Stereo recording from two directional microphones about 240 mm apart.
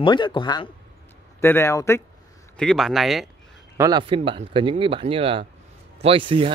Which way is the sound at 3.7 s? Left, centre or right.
Centre.